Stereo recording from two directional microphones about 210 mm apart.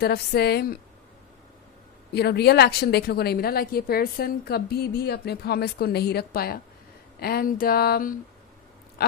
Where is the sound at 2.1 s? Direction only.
50° left (ahead or behind).